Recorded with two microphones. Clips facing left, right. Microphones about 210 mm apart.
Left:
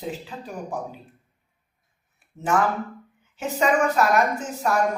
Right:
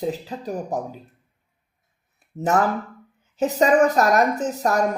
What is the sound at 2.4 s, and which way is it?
Speech, 40° right (ahead or behind).